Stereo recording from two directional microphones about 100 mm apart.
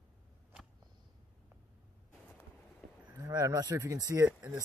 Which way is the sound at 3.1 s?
35° right (ahead or behind).